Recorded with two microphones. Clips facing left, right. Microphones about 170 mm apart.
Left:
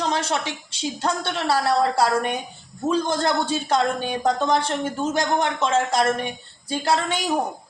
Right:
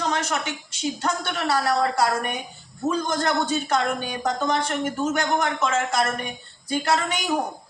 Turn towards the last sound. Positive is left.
turn(degrees=30)  # may be behind; listen again after turning